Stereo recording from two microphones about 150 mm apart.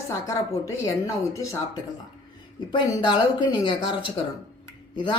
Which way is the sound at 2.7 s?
30° left (ahead or behind).